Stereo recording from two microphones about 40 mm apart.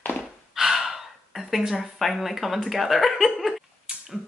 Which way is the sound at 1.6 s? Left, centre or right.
Centre.